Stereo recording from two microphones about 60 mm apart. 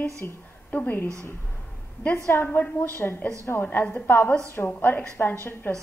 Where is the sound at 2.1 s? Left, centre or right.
Left.